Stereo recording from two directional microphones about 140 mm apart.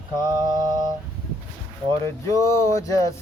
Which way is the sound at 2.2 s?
20° left (ahead or behind).